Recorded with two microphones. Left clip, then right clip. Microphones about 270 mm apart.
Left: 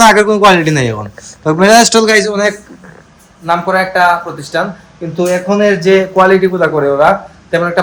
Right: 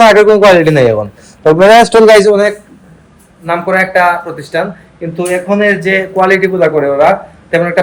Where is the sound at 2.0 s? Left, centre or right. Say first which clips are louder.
Right 6 dB; centre.